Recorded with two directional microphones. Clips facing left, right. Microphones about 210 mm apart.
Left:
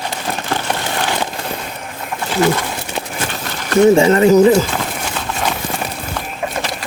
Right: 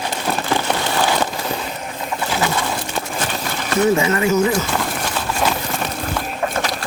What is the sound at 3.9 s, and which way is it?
Speech, 30° left (ahead or behind).